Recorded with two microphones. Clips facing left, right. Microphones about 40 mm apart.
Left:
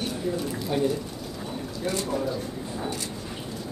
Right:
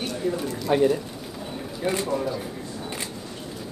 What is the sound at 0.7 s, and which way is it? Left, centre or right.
Speech, right.